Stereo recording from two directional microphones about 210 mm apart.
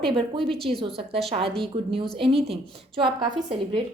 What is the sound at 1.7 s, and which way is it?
A woman's voice, 20° right (ahead or behind).